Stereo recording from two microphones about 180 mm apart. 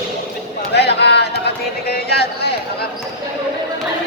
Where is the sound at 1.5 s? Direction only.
60° left (ahead or behind).